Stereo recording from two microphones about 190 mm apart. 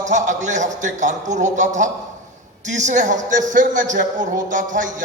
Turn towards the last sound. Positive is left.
turn(degrees=-45)  # may be behind; listen again after turning